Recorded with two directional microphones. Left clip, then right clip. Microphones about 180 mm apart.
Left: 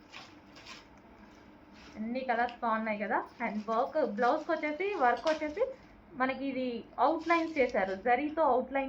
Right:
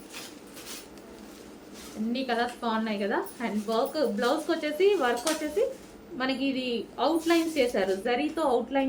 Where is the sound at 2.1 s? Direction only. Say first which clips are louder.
Right 2 dB; 45° right (ahead or behind).